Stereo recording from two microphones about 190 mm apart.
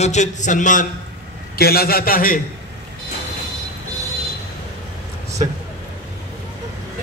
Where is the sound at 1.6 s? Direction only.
55° left (ahead or behind).